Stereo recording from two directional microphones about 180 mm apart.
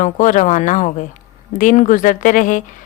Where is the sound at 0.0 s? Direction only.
45° left (ahead or behind).